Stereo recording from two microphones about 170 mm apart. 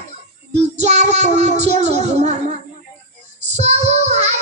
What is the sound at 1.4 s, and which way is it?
Speech, 40° right (ahead or behind).